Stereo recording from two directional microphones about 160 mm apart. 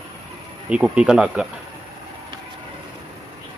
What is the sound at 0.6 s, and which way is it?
Speech, 5° right (ahead or behind).